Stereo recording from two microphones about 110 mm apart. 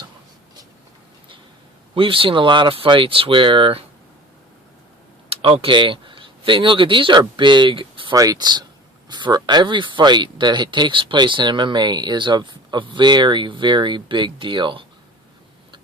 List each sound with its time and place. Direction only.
2.0 s speech: 55° right (ahead or behind)
5.3 s typing: 55° right (ahead or behind)
5.6 s speech: 50° right (ahead or behind)
8.1 s speech: 35° right (ahead or behind); by 14.8 s 50° right (ahead or behind)